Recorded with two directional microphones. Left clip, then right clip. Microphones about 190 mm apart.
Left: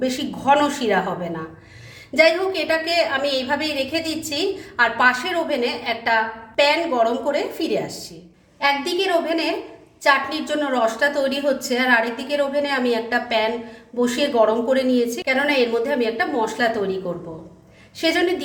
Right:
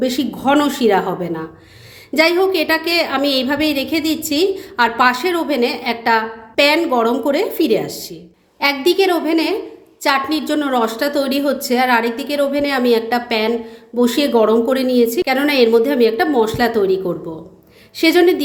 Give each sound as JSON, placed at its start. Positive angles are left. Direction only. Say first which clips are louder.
{"t": 0.0, "sound": "a woman's voice", "louder": "right 4 dB", "side_deg": -40}